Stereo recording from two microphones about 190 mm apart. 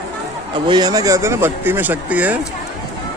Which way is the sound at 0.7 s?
20° right (ahead or behind).